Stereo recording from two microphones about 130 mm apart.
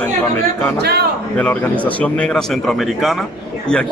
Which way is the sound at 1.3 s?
10° left (ahead or behind).